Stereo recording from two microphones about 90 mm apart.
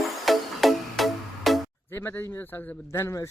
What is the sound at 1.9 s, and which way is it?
A man's voice, 25° left (ahead or behind).